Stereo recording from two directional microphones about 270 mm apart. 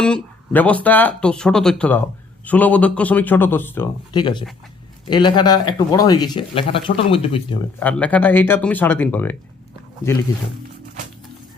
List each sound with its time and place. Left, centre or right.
0.0 s speech: centre
7.8 s speech: centre